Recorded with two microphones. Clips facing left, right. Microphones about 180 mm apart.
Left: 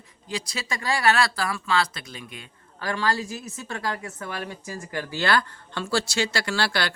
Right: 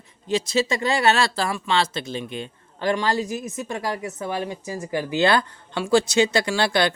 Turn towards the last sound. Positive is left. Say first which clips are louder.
# right 5 dB
turn(degrees=-20)  # may be behind; listen again after turning